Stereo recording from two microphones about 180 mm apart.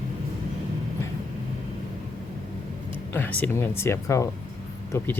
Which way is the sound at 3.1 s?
10° left (ahead or behind).